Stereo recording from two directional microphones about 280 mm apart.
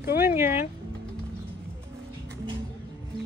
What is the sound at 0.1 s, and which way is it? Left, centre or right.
Speech, centre.